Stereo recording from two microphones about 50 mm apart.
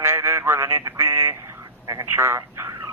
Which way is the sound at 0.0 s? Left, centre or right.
Right.